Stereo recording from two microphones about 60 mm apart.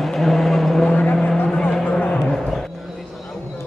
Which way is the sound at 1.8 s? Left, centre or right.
Centre.